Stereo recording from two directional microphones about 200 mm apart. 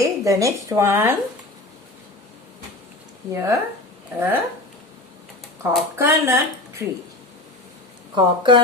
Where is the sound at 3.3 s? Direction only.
15° right (ahead or behind).